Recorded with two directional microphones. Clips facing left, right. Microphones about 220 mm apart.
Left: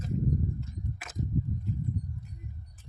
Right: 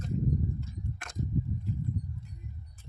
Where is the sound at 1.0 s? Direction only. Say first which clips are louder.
Even; 5° left (ahead or behind).